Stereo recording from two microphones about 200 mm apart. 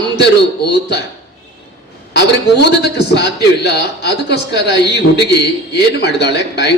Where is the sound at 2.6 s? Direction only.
55° left (ahead or behind).